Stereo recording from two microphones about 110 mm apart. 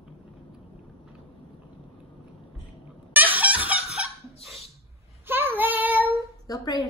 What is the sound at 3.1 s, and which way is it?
Snicker, 15° right (ahead or behind).